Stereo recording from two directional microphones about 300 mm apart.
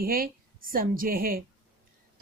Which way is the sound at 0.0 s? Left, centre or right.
Right.